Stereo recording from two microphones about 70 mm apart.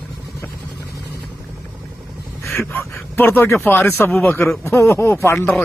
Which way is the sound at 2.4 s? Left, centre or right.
Left.